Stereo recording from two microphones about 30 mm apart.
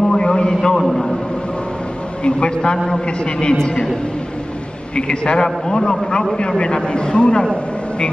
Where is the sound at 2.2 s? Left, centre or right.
Left.